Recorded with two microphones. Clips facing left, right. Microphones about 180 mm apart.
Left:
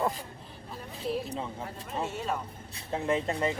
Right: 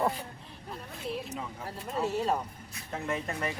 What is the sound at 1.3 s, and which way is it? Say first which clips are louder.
Speech: left 2 dB; 30° left (ahead or behind).